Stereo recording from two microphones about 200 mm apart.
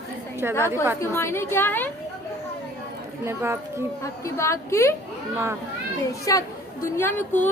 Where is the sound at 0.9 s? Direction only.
10° left (ahead or behind).